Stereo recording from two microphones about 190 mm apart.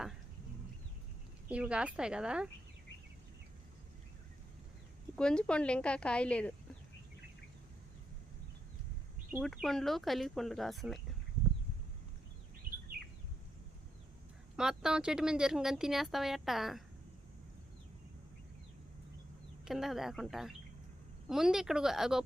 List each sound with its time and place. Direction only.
1.5 s speech: 5° right (ahead or behind)
5.1 s speech: 5° left (ahead or behind)
9.4 s speech: centre (ahead or behind)
14.5 s speech: 5° right (ahead or behind)
19.6 s speech: centre (ahead or behind)